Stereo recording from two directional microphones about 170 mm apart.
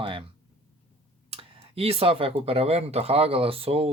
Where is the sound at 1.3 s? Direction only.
35° right (ahead or behind).